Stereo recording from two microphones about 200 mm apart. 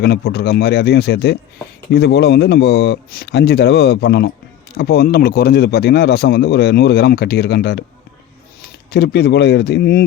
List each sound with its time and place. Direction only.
0.0 s speech: 55° left (ahead or behind)